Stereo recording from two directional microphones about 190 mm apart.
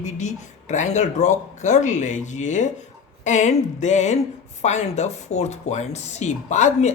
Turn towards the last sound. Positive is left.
turn(degrees=40)  # may be behind; listen again after turning